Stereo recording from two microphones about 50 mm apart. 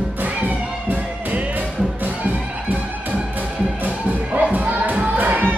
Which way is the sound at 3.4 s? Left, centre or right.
Right.